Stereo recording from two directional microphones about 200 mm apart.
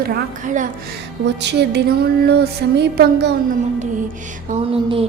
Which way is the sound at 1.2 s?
60° right (ahead or behind).